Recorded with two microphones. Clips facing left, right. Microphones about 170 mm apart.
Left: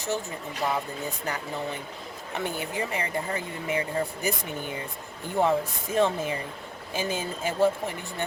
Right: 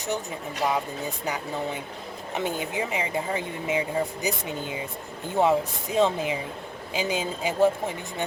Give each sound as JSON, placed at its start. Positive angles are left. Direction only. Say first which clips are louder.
{"t": 0.0, "sound": "speech", "louder": "right 1 dB", "side_deg": -15}